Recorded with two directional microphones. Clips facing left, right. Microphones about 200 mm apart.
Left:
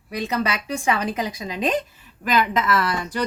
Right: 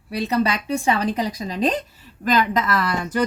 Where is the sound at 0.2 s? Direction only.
35° right (ahead or behind).